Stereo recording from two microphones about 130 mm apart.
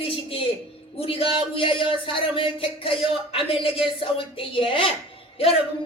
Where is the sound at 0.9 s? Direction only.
45° left (ahead or behind).